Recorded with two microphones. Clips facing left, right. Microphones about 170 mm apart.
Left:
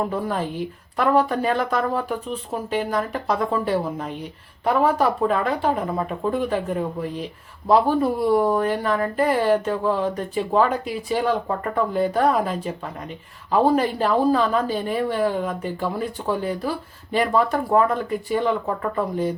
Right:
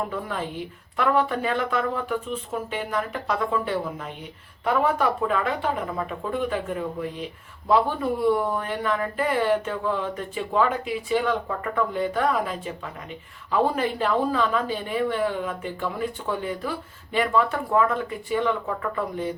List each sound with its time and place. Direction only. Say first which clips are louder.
0.1 s speech: left 5 dB; 40° left (ahead or behind)